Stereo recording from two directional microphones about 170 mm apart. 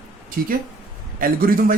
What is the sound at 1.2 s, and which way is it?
Speech, 60° right (ahead or behind).